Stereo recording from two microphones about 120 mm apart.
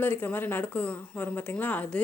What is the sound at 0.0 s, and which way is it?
Speech, 15° left (ahead or behind).